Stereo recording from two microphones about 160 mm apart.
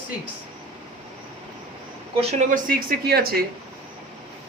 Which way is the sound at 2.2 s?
45° right (ahead or behind).